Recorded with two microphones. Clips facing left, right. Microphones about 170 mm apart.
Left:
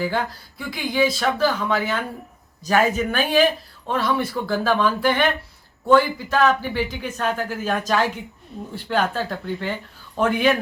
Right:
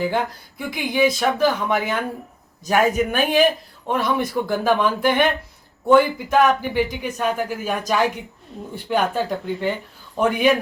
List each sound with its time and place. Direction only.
0.0 s a man's voice: 20° right (ahead or behind)